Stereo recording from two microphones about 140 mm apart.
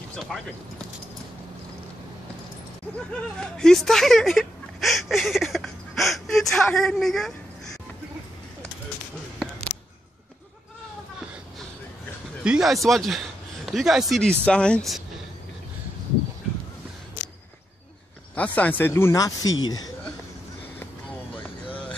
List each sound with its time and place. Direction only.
0.2 s speech: centre (ahead or behind)
3.3 s speech: 5° left (ahead or behind)
12.4 s speech: 5° right (ahead or behind)
18.3 s speech: 10° left (ahead or behind); by 19.9 s 25° left (ahead or behind)